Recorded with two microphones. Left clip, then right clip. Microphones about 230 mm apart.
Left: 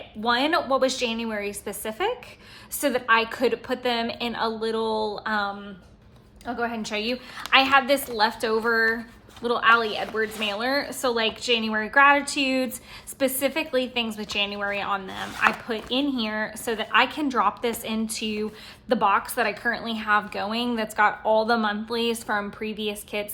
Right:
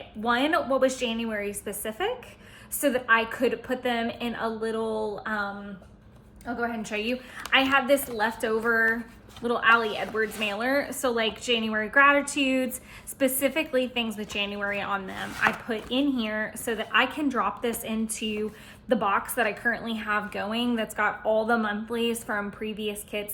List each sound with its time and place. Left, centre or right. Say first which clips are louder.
0.2 s a woman's voice: left 2 dB; centre
6.9 s a woman's voice: left 2 dB; centre